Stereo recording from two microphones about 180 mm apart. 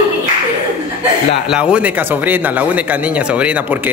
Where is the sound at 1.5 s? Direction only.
5° right (ahead or behind).